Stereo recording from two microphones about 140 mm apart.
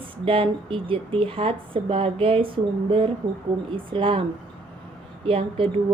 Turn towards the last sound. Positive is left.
turn(degrees=-40)  # may be behind; listen again after turning